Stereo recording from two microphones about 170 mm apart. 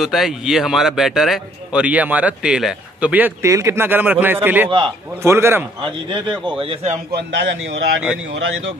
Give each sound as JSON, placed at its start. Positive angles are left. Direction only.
{"t": 0.0, "sound": "a man's voice", "side_deg": 0}
{"t": 4.6, "sound": "speech", "side_deg": -25}
{"t": 5.2, "sound": "a man's voice", "side_deg": -15}
{"t": 5.8, "sound": "a man's voice", "side_deg": -30}
{"t": 7.2, "sound": "a man's voice", "side_deg": -90}